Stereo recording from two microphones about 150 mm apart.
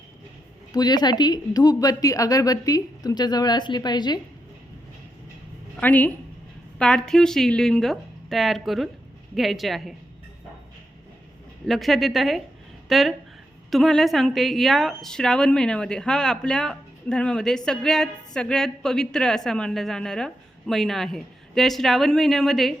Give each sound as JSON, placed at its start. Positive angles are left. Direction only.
{"t": 0.7, "sound": "a woman's voice", "side_deg": 25}
{"t": 5.7, "sound": "a woman's voice", "side_deg": 10}
{"t": 11.6, "sound": "a woman's voice", "side_deg": 0}